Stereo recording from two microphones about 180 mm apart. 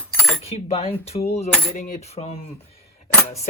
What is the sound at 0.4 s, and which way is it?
Speech, 35° left (ahead or behind).